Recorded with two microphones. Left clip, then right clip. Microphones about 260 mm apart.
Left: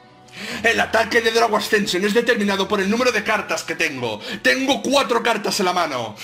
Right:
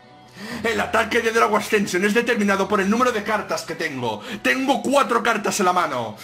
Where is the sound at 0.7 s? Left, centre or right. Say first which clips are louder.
Left 3 dB; left.